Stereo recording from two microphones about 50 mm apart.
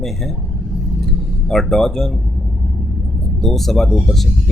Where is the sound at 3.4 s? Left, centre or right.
Centre.